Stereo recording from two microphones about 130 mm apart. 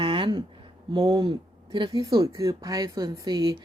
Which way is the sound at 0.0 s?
40° right (ahead or behind).